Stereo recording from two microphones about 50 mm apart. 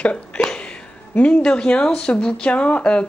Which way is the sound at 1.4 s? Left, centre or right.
Centre.